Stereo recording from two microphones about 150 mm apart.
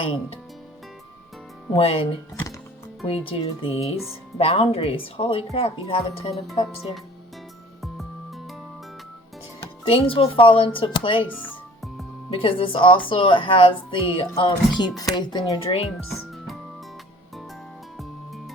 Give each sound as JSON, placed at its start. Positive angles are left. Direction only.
{"t": 0.0, "sound": "speech", "side_deg": 35}
{"t": 1.7, "sound": "speech", "side_deg": 40}
{"t": 3.1, "sound": "speech", "side_deg": 40}
{"t": 9.9, "sound": "speech", "side_deg": 40}
{"t": 12.3, "sound": "speech", "side_deg": 40}